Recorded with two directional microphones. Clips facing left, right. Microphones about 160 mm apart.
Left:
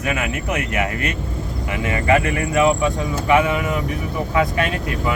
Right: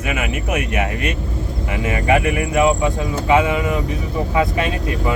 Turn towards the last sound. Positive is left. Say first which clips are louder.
# right 1 dB
turn(degrees=-20)  # may be behind; listen again after turning